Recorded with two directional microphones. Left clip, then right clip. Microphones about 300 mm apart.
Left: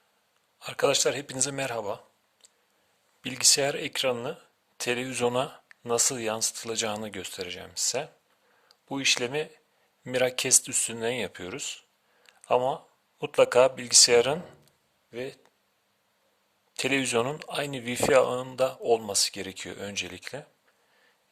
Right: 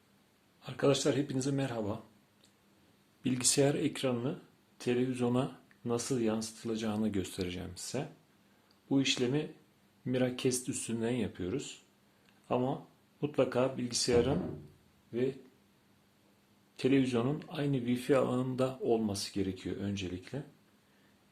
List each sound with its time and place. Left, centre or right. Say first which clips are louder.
0.6 s a man's voice: left 6 dB; left
3.2 s a man's voice: left 6 dB; left
12.2 s a sound: left 9 dB; left
13.1 s a man's voice: left 10 dB; left
16.7 s a man's voice: left 5 dB; left